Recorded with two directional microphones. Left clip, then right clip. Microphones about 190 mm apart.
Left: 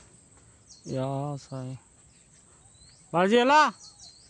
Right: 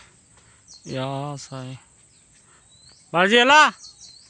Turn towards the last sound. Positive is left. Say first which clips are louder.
# right 6 dB
turn(degrees=-5)  # may be behind; listen again after turning